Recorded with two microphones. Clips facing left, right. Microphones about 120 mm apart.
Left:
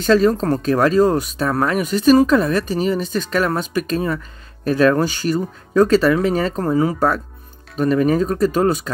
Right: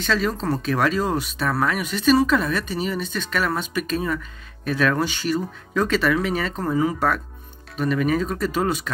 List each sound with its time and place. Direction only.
0.0 s speech: 40° left (ahead or behind)